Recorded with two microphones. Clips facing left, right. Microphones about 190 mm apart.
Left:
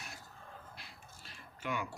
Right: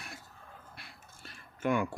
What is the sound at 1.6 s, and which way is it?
Speech, 50° right (ahead or behind).